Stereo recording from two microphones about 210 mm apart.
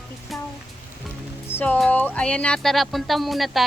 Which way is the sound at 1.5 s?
10° left (ahead or behind).